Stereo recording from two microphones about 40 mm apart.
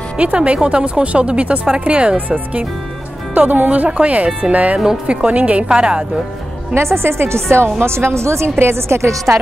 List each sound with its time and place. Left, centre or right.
0.2 s speech: right
2.1 s speech: right
5.7 s speech: right
6.7 s a woman's voice: right
9.3 s speech: right